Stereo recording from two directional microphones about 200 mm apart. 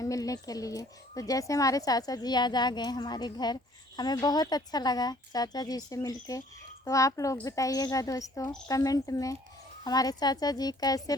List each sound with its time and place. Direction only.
0.0 s a woman's voice: 15° left (ahead or behind)